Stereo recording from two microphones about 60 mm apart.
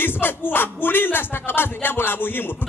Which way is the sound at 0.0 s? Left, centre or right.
Left.